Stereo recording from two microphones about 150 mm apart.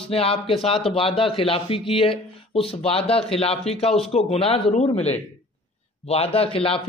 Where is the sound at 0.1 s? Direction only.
40° left (ahead or behind).